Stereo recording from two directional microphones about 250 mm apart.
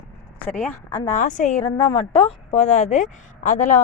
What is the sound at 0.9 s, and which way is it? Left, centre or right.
A woman's voice, left.